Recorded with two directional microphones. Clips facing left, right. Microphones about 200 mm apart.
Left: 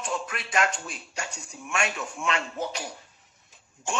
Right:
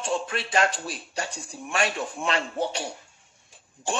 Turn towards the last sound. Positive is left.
turn(degrees=-35)  # may be behind; listen again after turning